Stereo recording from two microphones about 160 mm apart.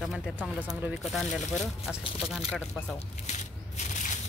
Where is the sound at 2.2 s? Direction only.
5° right (ahead or behind).